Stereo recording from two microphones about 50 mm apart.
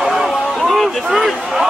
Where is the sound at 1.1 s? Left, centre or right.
Centre.